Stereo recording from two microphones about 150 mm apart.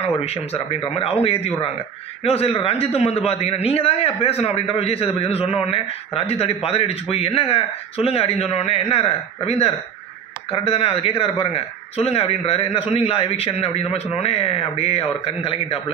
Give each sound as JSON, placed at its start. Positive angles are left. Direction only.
{"t": 0.0, "sound": "a man's voice", "side_deg": 45}